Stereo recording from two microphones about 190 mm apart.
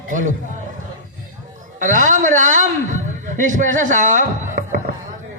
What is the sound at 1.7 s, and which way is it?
A man's voice, 45° right (ahead or behind).